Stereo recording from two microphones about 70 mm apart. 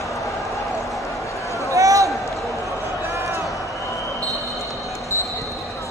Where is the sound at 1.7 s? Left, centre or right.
Right.